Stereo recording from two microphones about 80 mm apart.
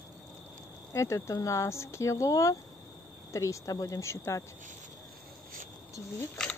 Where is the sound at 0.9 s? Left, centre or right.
Left.